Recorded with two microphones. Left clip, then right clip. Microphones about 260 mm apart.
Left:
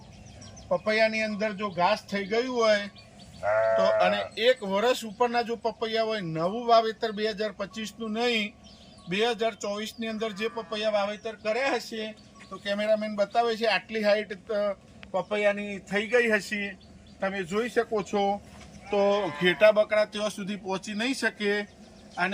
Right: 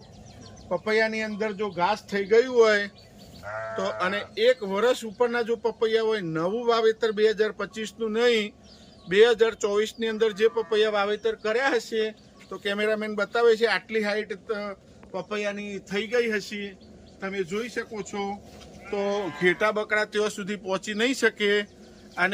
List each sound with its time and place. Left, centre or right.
0.7 s speech: centre
3.9 s a man's voice: centre